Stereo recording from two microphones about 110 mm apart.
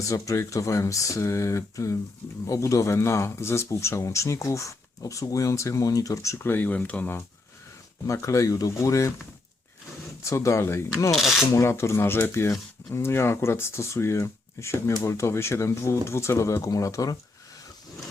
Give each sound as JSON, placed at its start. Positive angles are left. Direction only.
{"t": 0.1, "sound": "speech", "side_deg": 30}
{"t": 8.0, "sound": "speech", "side_deg": 30}
{"t": 10.2, "sound": "speech", "side_deg": 25}
{"t": 11.1, "sound": "filing", "side_deg": 0}
{"t": 11.3, "sound": "speech", "side_deg": 25}